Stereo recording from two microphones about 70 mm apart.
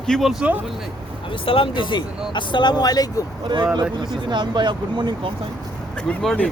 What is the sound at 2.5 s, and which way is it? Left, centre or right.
Speech, left.